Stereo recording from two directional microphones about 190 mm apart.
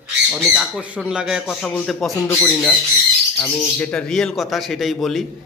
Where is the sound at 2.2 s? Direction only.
15° left (ahead or behind).